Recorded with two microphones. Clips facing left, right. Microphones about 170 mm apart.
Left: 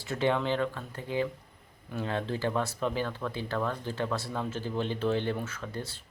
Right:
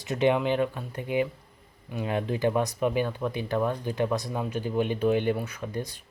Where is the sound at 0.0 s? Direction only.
20° right (ahead or behind).